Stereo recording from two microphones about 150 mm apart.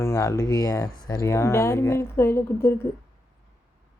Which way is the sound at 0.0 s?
20° left (ahead or behind).